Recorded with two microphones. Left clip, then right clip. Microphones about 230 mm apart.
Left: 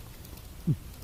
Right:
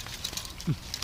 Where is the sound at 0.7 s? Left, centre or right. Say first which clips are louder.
Left 5 dB; left.